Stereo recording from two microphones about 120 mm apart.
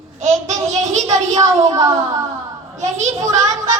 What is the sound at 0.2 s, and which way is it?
Speech, 75° right (ahead or behind).